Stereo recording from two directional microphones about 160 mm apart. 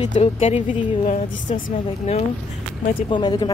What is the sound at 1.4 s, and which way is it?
Speech, 55° left (ahead or behind).